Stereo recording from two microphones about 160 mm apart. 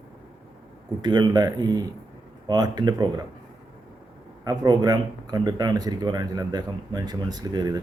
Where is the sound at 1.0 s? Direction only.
25° right (ahead or behind).